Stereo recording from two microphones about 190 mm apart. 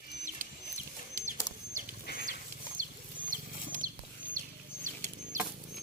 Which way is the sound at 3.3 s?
45° right (ahead or behind).